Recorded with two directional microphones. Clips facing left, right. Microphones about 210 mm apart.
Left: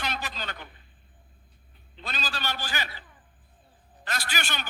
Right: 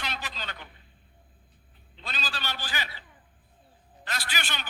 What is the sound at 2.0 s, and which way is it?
A man's voice, 45° left (ahead or behind).